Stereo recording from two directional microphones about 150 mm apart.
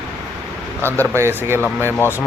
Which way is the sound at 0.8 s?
15° left (ahead or behind).